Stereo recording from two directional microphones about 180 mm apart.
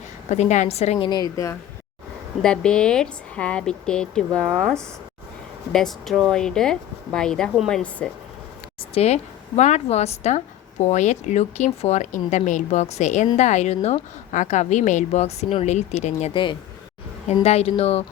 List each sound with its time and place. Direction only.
0.3 s a woman's voice: 40° left (ahead or behind); by 1.5 s 20° left (ahead or behind)
2.4 s speech: 5° left (ahead or behind)
9.0 s a woman's voice: 35° left (ahead or behind)